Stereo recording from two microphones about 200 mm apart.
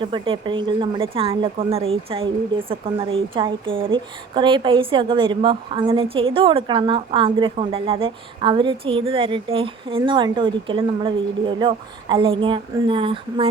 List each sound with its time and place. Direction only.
0.0 s a woman's voice: 25° right (ahead or behind)